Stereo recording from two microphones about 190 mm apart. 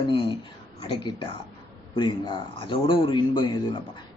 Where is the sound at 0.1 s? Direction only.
25° left (ahead or behind).